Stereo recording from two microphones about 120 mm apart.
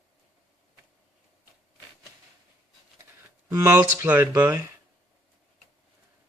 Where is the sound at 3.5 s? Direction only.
25° right (ahead or behind).